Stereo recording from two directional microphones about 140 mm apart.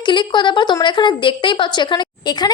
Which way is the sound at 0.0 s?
35° left (ahead or behind).